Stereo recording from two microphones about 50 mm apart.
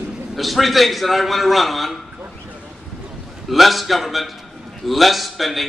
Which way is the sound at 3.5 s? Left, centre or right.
Centre.